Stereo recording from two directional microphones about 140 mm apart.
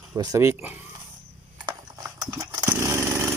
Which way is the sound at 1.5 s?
30° right (ahead or behind).